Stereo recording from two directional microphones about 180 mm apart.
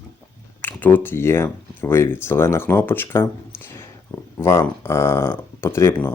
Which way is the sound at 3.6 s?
15° left (ahead or behind).